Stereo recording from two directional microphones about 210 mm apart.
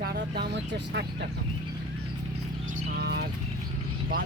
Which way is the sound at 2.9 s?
50° right (ahead or behind).